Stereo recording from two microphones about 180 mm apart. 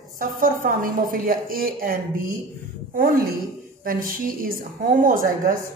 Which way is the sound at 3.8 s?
50° right (ahead or behind).